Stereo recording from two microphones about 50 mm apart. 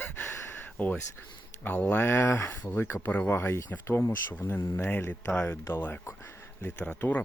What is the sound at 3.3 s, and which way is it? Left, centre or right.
Speech, left.